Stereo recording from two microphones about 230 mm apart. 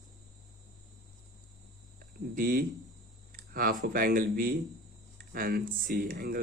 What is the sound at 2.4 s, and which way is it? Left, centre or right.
Speech, right.